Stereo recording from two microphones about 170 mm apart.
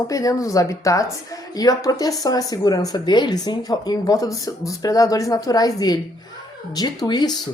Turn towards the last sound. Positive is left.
turn(degrees=25)  # may be behind; listen again after turning